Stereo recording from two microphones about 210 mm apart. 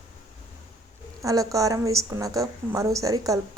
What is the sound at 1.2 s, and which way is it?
A woman's voice, 15° right (ahead or behind).